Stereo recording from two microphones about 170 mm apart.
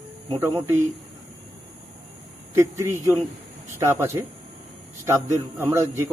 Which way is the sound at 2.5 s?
15° right (ahead or behind).